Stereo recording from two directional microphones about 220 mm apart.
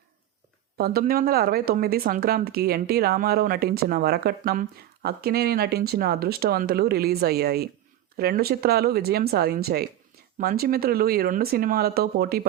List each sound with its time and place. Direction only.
0.8 s speech: 45° right (ahead or behind)